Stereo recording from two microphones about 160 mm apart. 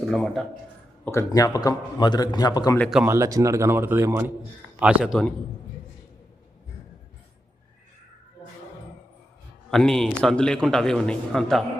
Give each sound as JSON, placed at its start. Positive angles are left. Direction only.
{"t": 0.1, "sound": "a man's voice", "side_deg": 0}
{"t": 1.0, "sound": "a man's voice", "side_deg": 20}
{"t": 3.1, "sound": "a man's voice", "side_deg": -20}
{"t": 9.6, "sound": "a man's voice", "side_deg": 0}